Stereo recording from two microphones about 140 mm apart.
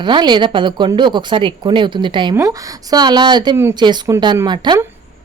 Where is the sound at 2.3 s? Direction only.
20° right (ahead or behind).